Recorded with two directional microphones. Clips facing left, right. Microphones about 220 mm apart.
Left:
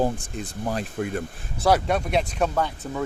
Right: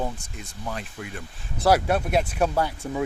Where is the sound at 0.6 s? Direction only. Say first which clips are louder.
Left 7 dB; 45° left (ahead or behind).